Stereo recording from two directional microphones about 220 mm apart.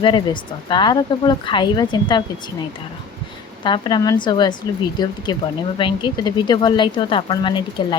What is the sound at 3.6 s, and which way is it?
Speech, 20° left (ahead or behind).